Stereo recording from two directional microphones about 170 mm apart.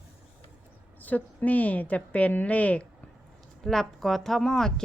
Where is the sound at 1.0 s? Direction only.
10° left (ahead or behind).